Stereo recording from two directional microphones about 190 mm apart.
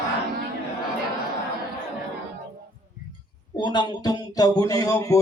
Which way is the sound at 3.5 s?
25° left (ahead or behind).